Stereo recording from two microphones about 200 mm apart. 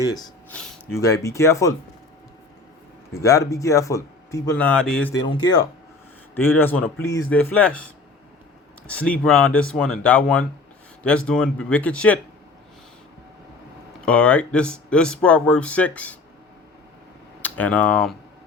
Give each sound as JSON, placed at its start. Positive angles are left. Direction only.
{"t": 0.5, "sound": "speech", "side_deg": 10}
{"t": 3.2, "sound": "speech", "side_deg": 15}
{"t": 5.3, "sound": "speech", "side_deg": 20}
{"t": 6.3, "sound": "speech", "side_deg": 10}
{"t": 9.0, "sound": "speech", "side_deg": 5}
{"t": 14.0, "sound": "speech", "side_deg": 5}
{"t": 17.4, "sound": "speech", "side_deg": 10}